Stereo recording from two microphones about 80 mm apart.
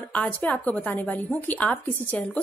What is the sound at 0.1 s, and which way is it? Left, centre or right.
A woman's voice, centre.